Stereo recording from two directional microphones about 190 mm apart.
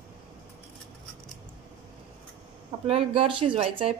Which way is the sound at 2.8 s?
30° right (ahead or behind).